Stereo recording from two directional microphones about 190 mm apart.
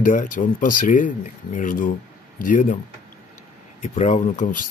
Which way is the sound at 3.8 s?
40° left (ahead or behind).